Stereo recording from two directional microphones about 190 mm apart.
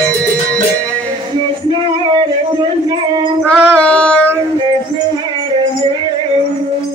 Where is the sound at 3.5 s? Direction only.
10° right (ahead or behind).